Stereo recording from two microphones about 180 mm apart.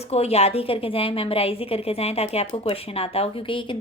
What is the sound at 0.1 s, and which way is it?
A woman's voice, 35° left (ahead or behind).